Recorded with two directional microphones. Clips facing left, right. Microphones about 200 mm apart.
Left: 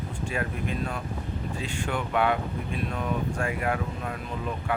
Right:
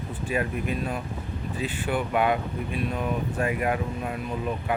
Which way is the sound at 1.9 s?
15° right (ahead or behind).